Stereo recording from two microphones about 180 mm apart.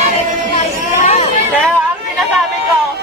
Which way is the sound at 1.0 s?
35° left (ahead or behind).